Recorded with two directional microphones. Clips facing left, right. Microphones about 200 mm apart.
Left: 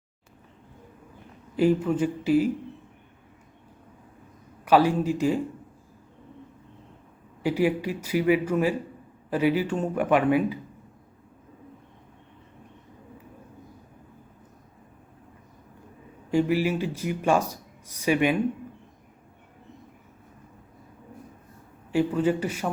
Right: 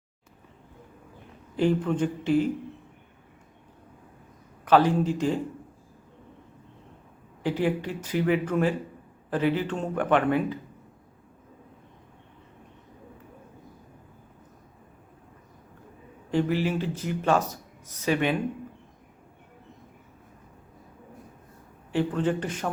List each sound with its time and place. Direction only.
1.5 s speech: 5° left (ahead or behind)
4.6 s speech: 10° left (ahead or behind)
7.4 s speech: 10° left (ahead or behind)
16.3 s speech: 10° left (ahead or behind)
21.9 s speech: 10° left (ahead or behind)